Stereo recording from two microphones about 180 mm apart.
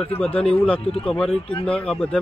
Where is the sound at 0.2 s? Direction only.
5° left (ahead or behind).